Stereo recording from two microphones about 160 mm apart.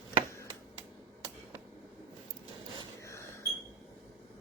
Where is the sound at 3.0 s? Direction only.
20° left (ahead or behind).